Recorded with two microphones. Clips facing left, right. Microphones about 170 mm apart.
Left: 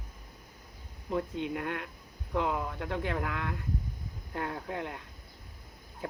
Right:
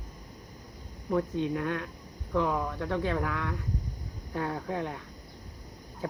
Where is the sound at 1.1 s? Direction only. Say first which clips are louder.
Right 4 dB; 20° left (ahead or behind).